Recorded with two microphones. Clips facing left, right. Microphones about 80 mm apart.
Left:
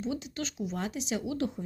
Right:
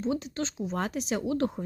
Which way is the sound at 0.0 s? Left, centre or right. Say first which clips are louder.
Right 4 dB; right.